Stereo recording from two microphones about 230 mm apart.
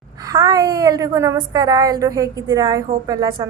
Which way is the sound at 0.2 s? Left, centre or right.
Centre.